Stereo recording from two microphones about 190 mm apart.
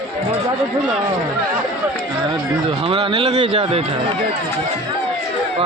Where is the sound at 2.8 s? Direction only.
30° right (ahead or behind).